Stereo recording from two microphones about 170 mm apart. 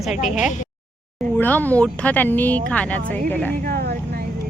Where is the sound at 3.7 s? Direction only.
70° right (ahead or behind).